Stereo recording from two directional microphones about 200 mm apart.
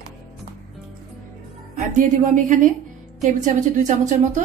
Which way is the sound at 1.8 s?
40° right (ahead or behind).